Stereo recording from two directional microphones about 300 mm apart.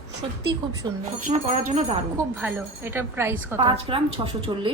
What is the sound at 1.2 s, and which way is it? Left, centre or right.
Speech, right.